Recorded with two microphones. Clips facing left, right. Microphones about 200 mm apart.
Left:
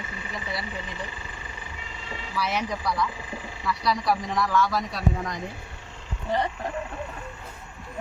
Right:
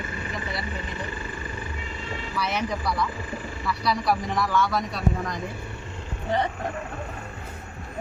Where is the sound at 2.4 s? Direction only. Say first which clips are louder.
Even; centre (ahead or behind).